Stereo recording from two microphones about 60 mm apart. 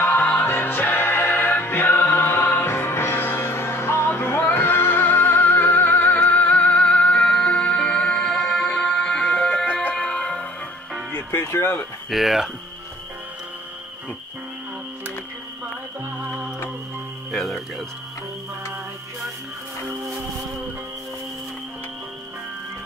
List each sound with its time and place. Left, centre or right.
0.0 s music: left; by 10.5 s centre
11.1 s music: left
11.4 s speech: left
12.1 s speech: centre
17.3 s music: centre